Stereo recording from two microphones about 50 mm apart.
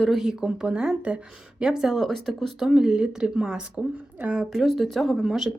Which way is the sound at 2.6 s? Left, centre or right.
Centre.